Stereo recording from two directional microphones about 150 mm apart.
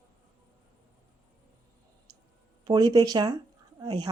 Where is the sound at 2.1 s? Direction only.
25° right (ahead or behind).